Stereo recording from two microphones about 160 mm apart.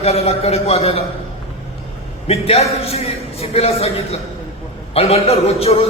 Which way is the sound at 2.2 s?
40° left (ahead or behind).